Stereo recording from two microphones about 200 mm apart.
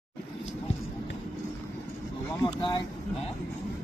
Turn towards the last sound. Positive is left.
turn(degrees=20)  # may be behind; listen again after turning